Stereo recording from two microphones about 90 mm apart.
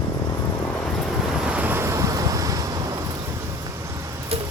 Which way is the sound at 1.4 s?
15° right (ahead or behind).